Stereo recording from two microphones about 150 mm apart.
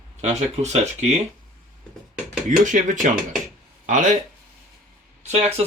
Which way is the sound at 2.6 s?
55° right (ahead or behind).